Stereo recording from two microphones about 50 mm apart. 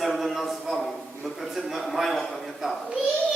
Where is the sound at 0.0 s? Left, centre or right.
Centre.